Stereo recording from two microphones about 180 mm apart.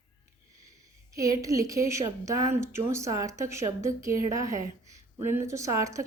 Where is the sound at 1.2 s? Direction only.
20° right (ahead or behind).